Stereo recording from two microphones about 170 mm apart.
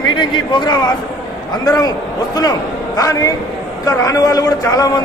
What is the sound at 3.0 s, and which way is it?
A man's voice, 20° left (ahead or behind).